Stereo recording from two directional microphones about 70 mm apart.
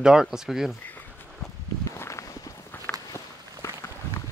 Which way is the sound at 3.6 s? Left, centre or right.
Left.